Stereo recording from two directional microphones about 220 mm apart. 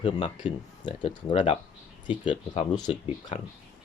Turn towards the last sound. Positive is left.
turn(degrees=20)  # may be behind; listen again after turning